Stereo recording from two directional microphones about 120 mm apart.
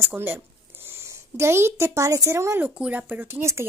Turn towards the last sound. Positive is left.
turn(degrees=-20)  # may be behind; listen again after turning